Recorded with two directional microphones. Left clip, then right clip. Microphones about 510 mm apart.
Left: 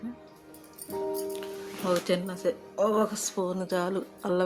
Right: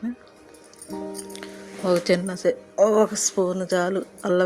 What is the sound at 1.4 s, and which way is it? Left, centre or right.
Speech, left.